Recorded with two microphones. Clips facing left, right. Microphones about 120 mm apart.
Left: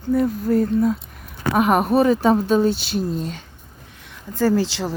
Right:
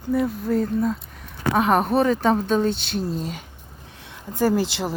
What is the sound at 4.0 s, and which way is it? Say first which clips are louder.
Speech: left 1 dB; 25° right (ahead or behind).